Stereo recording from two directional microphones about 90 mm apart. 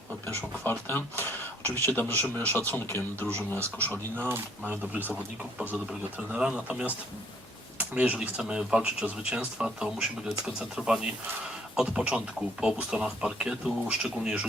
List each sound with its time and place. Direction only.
0.6 s speech: 25° left (ahead or behind)
4.3 s speech: 20° right (ahead or behind)
6.3 s speech: 15° right (ahead or behind)